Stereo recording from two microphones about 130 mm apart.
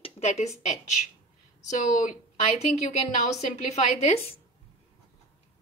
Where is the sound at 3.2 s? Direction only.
60° left (ahead or behind).